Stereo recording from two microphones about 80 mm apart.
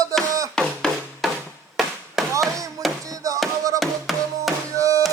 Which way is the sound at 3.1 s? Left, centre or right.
Right.